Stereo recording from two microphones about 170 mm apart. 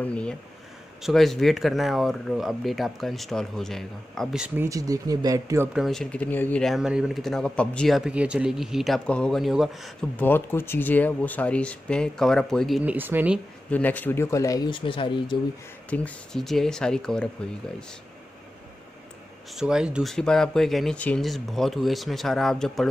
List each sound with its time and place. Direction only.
0.0 s speech: 5° left (ahead or behind)
4.6 s speech: 20° right (ahead or behind)
5.7 s speech: centre (ahead or behind)
10.1 s speech: 10° left (ahead or behind)
12.9 s speech: 10° right (ahead or behind)
13.7 s speech: 10° left (ahead or behind); by 15.3 s 30° left (ahead or behind)
15.9 s speech: 5° left (ahead or behind)
19.5 s speech: 5° right (ahead or behind)